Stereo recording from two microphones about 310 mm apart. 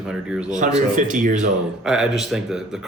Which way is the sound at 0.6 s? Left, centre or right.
Right.